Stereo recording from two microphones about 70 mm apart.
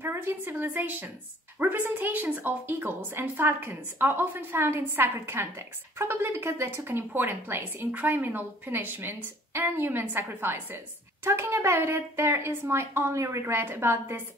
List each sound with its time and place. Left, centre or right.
0.0 s a woman's voice: right